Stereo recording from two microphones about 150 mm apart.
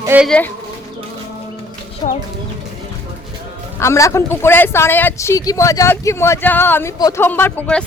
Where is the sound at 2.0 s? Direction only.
45° left (ahead or behind).